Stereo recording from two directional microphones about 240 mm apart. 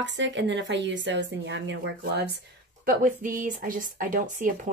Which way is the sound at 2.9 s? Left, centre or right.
Right.